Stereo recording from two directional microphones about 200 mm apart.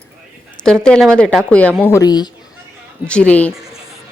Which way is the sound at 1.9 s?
15° left (ahead or behind).